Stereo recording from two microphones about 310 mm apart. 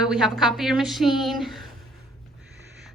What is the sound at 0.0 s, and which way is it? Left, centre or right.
A woman's voice, centre.